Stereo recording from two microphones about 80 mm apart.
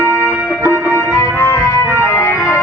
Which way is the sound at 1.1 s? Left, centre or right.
Left.